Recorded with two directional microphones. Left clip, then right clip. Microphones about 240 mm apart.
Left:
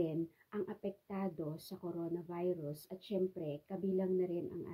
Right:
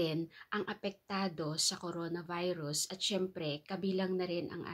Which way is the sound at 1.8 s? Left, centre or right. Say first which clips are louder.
Right 2 dB; centre.